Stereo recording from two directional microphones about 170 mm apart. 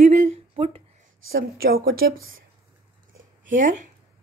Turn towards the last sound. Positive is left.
turn(degrees=-50)  # may be behind; listen again after turning